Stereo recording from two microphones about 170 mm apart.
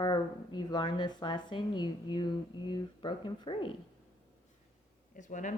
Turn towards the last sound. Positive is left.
turn(degrees=45)  # may be behind; listen again after turning